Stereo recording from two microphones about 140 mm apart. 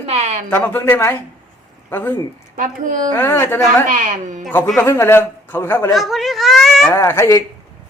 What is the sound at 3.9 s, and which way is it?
Speech, 65° right (ahead or behind).